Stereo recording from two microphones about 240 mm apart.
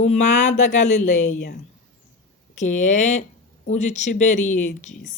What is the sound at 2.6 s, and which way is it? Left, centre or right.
Speech, left.